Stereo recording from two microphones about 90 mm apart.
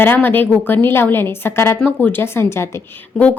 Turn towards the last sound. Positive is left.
turn(degrees=15)  # may be behind; listen again after turning